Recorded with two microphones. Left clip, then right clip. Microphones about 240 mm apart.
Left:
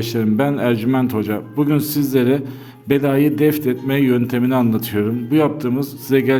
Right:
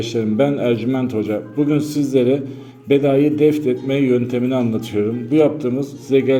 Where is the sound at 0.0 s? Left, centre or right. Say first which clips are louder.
Right 1 dB; left.